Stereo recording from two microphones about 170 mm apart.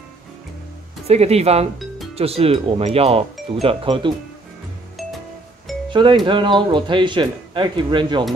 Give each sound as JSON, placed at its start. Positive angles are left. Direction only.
{"t": 1.0, "sound": "speech", "side_deg": -40}
{"t": 5.9, "sound": "music", "side_deg": -30}
{"t": 6.2, "sound": "speech", "side_deg": -30}